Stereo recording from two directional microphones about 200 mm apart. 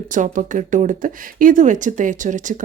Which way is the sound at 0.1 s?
40° right (ahead or behind).